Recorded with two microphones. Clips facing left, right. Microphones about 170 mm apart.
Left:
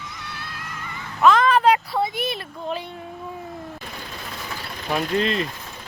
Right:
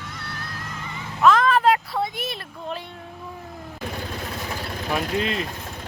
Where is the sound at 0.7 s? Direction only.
25° right (ahead or behind).